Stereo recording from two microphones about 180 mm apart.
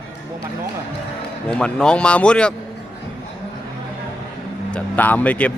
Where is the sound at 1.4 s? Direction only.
5° left (ahead or behind).